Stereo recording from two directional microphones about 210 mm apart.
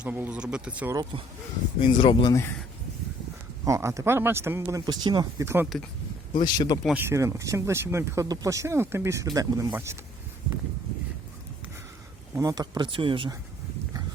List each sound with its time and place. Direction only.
0.0 s speech: 5° right (ahead or behind)
1.8 s speech: 25° left (ahead or behind)
3.6 s speech: 15° right (ahead or behind)
6.3 s speech: 20° left (ahead or behind)
6.8 s speech: 10° right (ahead or behind)
12.3 s speech: 15° right (ahead or behind)